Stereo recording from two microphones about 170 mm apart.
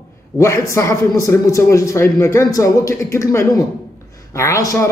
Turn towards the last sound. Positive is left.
turn(degrees=20)  # may be behind; listen again after turning